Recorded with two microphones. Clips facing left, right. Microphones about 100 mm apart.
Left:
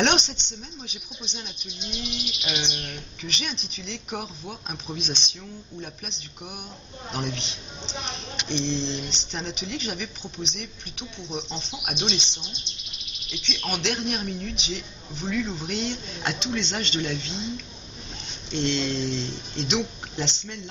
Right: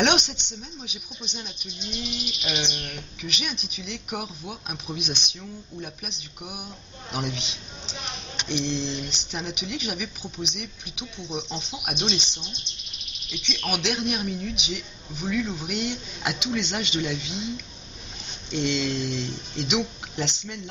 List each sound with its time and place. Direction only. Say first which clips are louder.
0.0 s a sound: right 1 dB; 5° right (ahead or behind)
0.8 s speech: right 1 dB; 5° right (ahead or behind)
2.9 s speech: even; 5° right (ahead or behind)
7.8 s a sound: left 4 dB; 25° left (ahead or behind)
8.5 s speech: even; 5° right (ahead or behind)
18.5 s speech: even; 5° right (ahead or behind)